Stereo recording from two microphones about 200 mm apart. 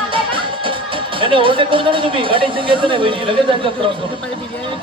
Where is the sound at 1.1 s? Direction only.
25° right (ahead or behind).